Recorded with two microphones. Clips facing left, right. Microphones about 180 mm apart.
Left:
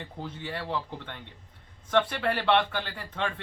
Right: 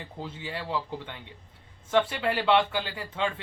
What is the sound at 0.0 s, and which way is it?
Speech, 5° right (ahead or behind).